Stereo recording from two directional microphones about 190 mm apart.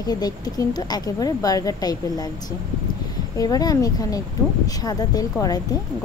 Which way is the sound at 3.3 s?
20° left (ahead or behind).